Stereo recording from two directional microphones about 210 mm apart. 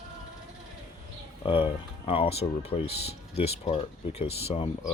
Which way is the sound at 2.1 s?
30° left (ahead or behind).